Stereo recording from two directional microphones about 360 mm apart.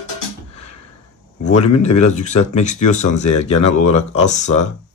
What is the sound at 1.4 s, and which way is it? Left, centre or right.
Speech, centre.